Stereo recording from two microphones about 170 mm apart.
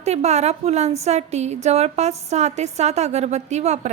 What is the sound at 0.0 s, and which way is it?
A woman's voice, 40° right (ahead or behind).